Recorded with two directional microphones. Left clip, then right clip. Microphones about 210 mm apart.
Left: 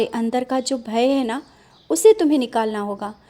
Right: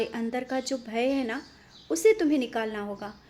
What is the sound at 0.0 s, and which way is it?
A woman's voice, 35° left (ahead or behind).